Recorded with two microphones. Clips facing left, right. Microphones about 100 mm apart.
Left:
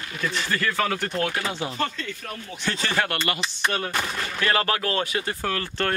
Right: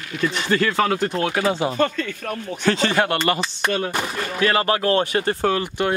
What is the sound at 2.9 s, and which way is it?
Speech, 20° right (ahead or behind).